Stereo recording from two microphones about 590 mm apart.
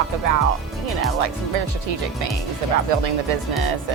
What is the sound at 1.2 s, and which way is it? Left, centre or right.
Speech, right.